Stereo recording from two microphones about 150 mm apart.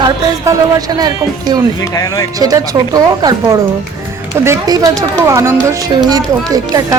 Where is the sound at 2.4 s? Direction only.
25° right (ahead or behind).